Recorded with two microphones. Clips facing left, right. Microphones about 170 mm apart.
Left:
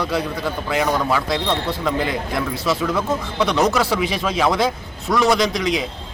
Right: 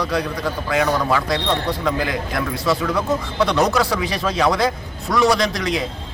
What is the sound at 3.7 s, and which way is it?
A man's voice, centre (ahead or behind).